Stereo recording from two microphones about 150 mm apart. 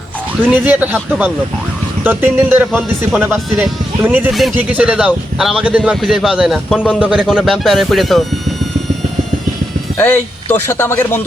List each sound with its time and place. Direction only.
0.6 s speech: 10° right (ahead or behind)
4.3 s speech: centre (ahead or behind)
10.0 s speech: 15° left (ahead or behind)